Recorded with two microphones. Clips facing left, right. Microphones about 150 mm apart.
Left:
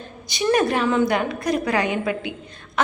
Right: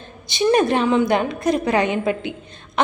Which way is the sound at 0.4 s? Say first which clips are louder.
Right 3 dB; 25° right (ahead or behind).